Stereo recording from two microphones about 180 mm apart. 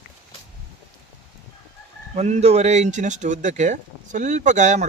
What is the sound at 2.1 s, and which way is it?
Speech, 40° right (ahead or behind).